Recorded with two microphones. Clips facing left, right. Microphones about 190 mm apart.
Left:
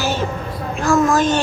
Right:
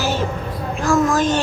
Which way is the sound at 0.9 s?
65° left (ahead or behind).